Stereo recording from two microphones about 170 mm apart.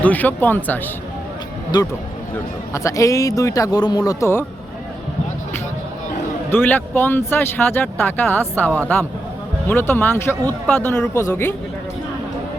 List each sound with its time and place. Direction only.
0.0 s speech: 10° left (ahead or behind)
2.7 s speech: 20° left (ahead or behind)
6.5 s speech: 10° left (ahead or behind)